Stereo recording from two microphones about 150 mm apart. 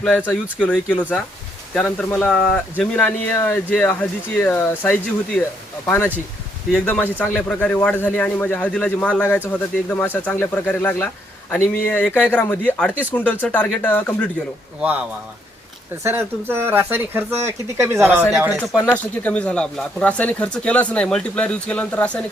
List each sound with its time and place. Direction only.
0.6 s speech: 5° left (ahead or behind)
12.9 s speech: 10° right (ahead or behind)
13.1 s speech: 10° left (ahead or behind)
14.8 s speech: 10° right (ahead or behind)
16.0 s speech: 15° right (ahead or behind)
18.3 s speech: 5° right (ahead or behind)
18.8 s speech: 10° left (ahead or behind)